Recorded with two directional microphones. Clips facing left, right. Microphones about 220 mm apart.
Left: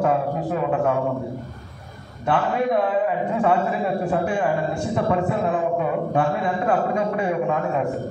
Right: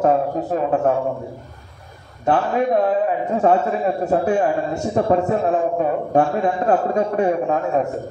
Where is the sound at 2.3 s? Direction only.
40° right (ahead or behind).